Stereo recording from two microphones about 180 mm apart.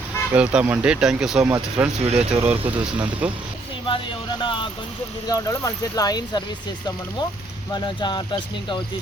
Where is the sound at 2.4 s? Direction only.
30° right (ahead or behind).